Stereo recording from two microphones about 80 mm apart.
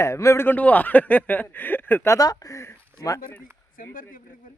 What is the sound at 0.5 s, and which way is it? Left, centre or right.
Speech, centre.